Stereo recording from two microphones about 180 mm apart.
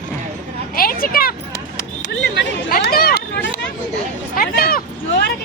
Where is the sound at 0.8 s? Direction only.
55° left (ahead or behind).